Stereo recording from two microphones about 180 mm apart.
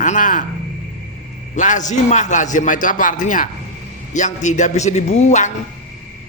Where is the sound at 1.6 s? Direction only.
45° left (ahead or behind).